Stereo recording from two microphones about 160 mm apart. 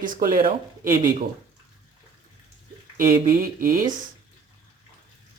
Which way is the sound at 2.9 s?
55° right (ahead or behind).